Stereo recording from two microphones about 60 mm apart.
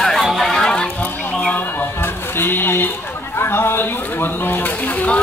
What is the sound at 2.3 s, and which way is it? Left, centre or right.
Sheep, left.